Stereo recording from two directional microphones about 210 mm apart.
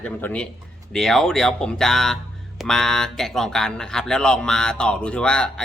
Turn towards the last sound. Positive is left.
turn(degrees=5)  # may be behind; listen again after turning